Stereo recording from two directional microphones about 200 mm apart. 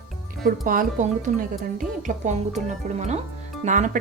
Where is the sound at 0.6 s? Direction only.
40° right (ahead or behind).